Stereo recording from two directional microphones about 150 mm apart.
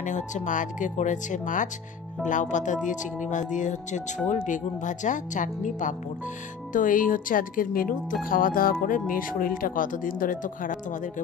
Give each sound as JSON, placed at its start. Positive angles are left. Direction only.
{"t": 0.0, "sound": "speech", "side_deg": 55}